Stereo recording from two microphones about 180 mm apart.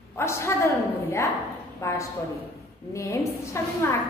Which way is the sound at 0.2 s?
15° left (ahead or behind).